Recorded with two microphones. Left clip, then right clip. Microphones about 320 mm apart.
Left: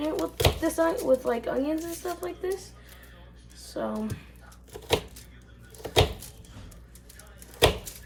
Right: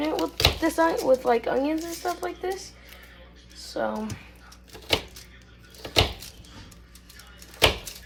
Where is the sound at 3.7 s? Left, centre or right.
Centre.